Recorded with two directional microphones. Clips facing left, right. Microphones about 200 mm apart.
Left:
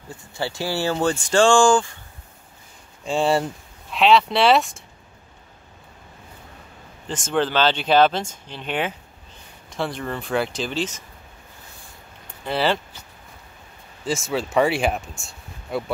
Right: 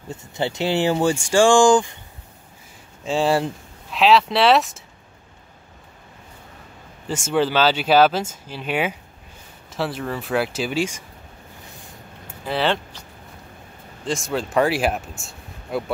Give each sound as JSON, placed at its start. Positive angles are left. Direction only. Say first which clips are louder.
{"t": 0.3, "sound": "speech", "louder": "right 4 dB", "side_deg": -20}
{"t": 3.1, "sound": "speech", "louder": "right 1 dB", "side_deg": 0}
{"t": 7.1, "sound": "speech", "louder": "right 2 dB", "side_deg": -10}
{"t": 12.4, "sound": "speech", "louder": "even", "side_deg": 0}
{"t": 14.0, "sound": "speech", "louder": "even", "side_deg": 0}